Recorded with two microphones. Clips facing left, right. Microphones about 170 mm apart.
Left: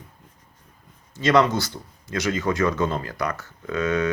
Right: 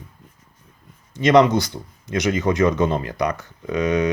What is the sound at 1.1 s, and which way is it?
Speech, 20° right (ahead or behind).